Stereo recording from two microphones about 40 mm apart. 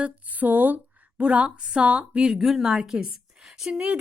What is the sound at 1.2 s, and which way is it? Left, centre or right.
A woman's voice, right.